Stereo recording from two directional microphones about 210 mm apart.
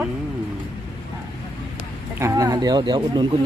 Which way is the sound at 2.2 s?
15° right (ahead or behind).